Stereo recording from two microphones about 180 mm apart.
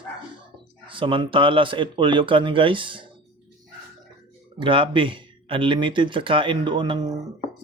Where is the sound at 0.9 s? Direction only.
30° right (ahead or behind).